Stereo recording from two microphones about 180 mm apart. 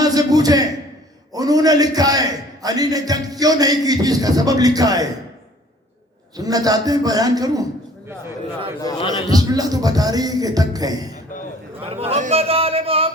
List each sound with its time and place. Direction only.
0.0 s a sound: 20° right (ahead or behind)
1.3 s a man's voice: 20° right (ahead or behind)
6.3 s a man's voice: 20° right (ahead or behind)
8.8 s a man's voice: 20° left (ahead or behind)
9.3 s a man's voice: 20° right (ahead or behind)
11.8 s a man's voice: 35° right (ahead or behind)